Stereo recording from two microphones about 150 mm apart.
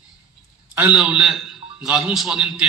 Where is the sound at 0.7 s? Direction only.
10° right (ahead or behind).